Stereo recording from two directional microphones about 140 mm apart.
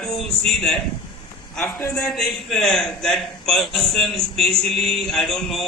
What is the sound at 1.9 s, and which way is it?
A man's voice, 5° left (ahead or behind).